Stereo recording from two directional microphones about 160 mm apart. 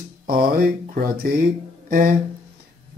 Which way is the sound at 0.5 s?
65° right (ahead or behind).